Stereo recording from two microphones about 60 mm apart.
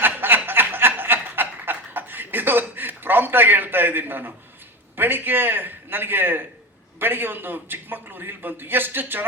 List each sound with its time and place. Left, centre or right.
0.0 s snicker: right
4.9 s a man's voice: right